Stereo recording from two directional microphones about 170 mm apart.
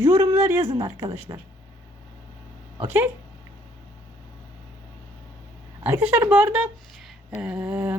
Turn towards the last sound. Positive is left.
turn(degrees=-10)  # may be behind; listen again after turning